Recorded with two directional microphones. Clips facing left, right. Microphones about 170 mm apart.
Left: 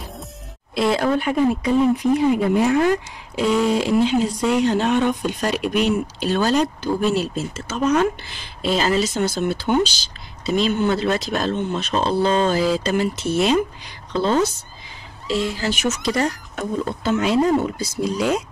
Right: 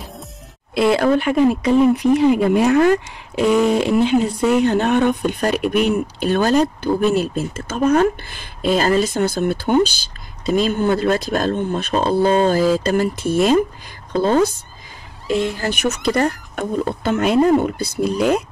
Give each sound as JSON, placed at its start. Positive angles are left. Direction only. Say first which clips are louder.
{"t": 0.7, "sound": "speech", "louder": "right 4 dB", "side_deg": -60}
{"t": 3.3, "sound": "speech", "louder": "right 3 dB", "side_deg": -55}